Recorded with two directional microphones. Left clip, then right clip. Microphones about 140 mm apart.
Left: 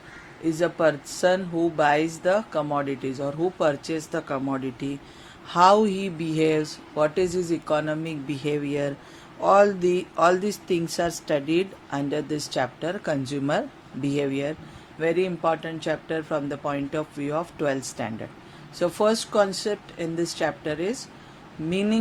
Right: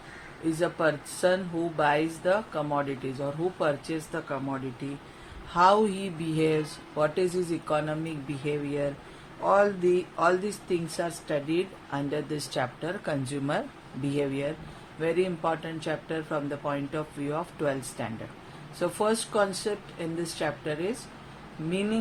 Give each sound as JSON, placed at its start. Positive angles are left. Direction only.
{"t": 0.6, "sound": "speech", "side_deg": 50}
{"t": 5.5, "sound": "speech", "side_deg": 55}
{"t": 21.7, "sound": "speech", "side_deg": 70}